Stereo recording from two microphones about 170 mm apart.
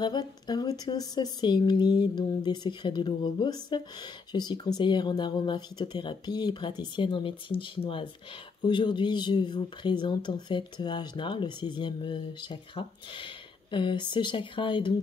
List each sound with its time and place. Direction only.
0.0 s speech: 25° left (ahead or behind)